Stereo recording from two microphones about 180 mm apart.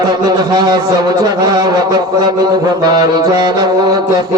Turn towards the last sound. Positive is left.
turn(degrees=-20)  # may be behind; listen again after turning